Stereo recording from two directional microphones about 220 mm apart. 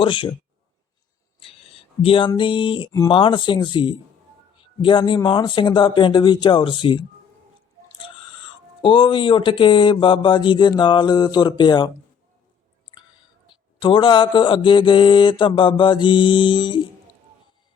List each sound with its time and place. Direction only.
0.0 s mantra: 20° left (ahead or behind)
1.4 s mantra: 25° left (ahead or behind)
7.9 s speech: 25° left (ahead or behind)
13.7 s mantra: 20° left (ahead or behind)